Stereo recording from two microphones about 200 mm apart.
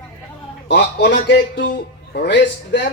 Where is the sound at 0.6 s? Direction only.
60° left (ahead or behind).